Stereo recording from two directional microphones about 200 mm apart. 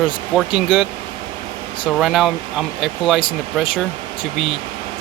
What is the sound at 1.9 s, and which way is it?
Speech, centre (ahead or behind).